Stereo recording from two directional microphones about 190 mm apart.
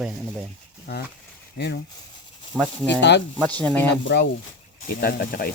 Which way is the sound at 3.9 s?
65° left (ahead or behind).